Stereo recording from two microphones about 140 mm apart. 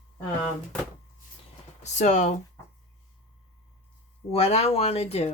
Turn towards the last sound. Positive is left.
turn(degrees=50)  # may be behind; listen again after turning